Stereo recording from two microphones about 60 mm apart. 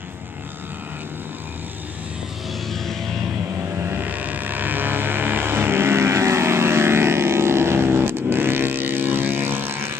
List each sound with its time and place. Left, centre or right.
2.7 s music: centre
3.9 s vehicle: right